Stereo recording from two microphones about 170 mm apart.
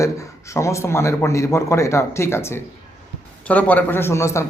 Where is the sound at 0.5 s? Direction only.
15° left (ahead or behind).